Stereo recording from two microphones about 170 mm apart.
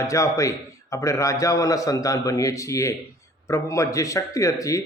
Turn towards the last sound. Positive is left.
turn(degrees=20)  # may be behind; listen again after turning